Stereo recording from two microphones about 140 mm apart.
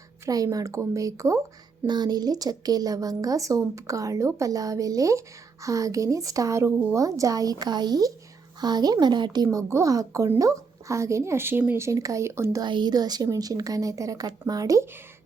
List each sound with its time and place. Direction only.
0.3 s speech: 25° right (ahead or behind)
12.6 s speech: 30° right (ahead or behind)